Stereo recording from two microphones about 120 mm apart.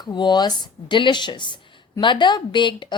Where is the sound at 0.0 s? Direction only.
35° left (ahead or behind).